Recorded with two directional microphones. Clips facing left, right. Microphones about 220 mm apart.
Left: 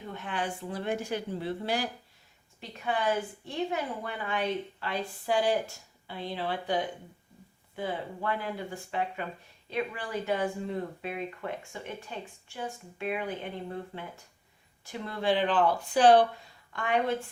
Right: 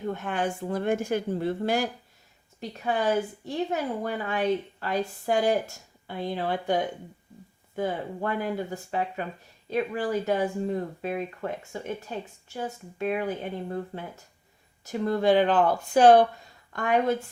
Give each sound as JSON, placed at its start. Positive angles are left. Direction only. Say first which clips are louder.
{"t": 0.0, "sound": "a woman's voice", "louder": "right 6 dB", "side_deg": -50}